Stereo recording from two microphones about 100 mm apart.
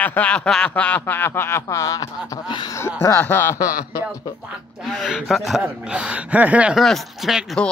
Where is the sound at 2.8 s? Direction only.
25° left (ahead or behind).